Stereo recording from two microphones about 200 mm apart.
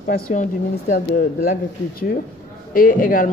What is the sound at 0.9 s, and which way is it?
Speech, 50° left (ahead or behind).